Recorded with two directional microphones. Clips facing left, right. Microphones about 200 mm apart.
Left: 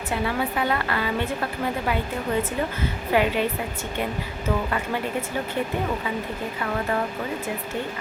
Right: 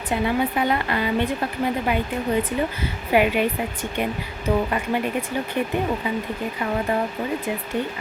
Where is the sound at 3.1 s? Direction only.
15° right (ahead or behind).